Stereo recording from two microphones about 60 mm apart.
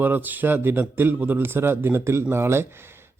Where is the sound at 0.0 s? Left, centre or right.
Right.